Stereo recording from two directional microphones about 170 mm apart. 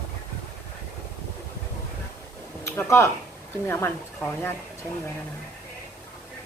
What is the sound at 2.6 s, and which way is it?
A woman's voice, 15° left (ahead or behind).